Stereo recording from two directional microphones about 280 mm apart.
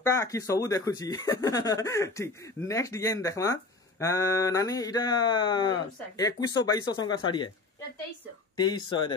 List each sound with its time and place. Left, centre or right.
0.0 s speech: centre
8.5 s speech: centre